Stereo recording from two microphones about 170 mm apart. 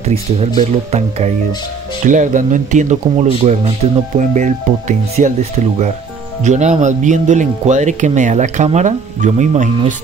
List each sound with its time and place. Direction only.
0.6 s speech: 40° right (ahead or behind)